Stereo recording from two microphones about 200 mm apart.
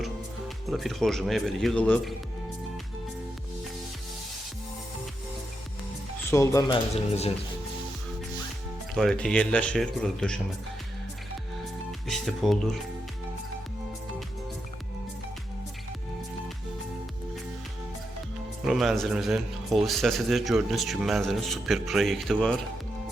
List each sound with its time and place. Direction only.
0.0 s speech: centre (ahead or behind)
6.3 s speech: 15° left (ahead or behind)
6.9 s speech: 30° left (ahead or behind)
9.0 s a man's voice: 5° left (ahead or behind)
11.9 s speech: centre (ahead or behind)
18.6 s a man's voice: centre (ahead or behind)